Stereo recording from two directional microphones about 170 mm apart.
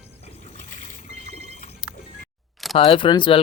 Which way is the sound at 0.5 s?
50° left (ahead or behind).